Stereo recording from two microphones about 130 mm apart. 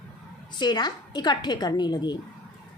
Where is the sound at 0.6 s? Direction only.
35° left (ahead or behind).